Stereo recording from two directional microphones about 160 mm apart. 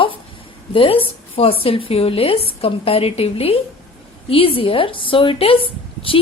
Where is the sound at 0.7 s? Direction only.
35° left (ahead or behind).